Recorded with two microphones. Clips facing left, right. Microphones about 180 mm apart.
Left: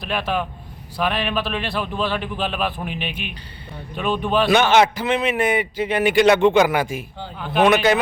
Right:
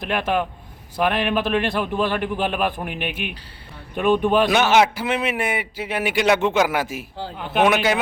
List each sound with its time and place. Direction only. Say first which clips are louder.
0.0 s a man's voice: right 2 dB; 20° right (ahead or behind)
2.8 s a man's voice: even; 55° right (ahead or behind)
4.0 s a man's voice: right 3 dB; 15° right (ahead or behind)